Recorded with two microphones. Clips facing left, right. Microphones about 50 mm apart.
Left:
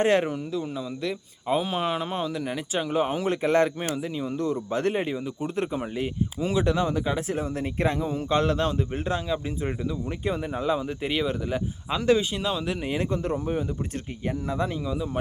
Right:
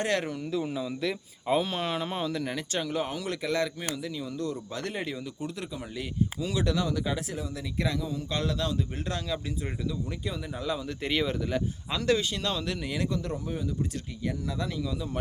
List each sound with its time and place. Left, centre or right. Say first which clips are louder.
0.0 s speech: left 7 dB; left
0.5 s speech: even; centre; by 7.3 s left
7.3 s speech: left 7 dB; left
11.0 s speech: left 2 dB; centre